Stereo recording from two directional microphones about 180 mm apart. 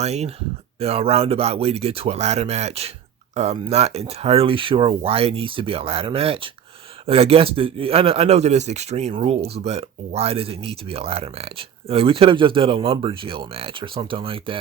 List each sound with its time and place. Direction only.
0.0 s speech: 35° right (ahead or behind)